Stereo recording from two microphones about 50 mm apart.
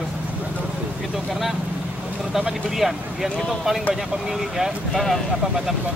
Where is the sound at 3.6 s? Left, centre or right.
Centre.